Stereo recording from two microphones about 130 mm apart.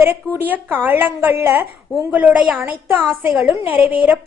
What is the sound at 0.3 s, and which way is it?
A woman's voice, 15° right (ahead or behind).